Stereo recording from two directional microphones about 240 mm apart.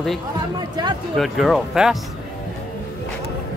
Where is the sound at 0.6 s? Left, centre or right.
Centre.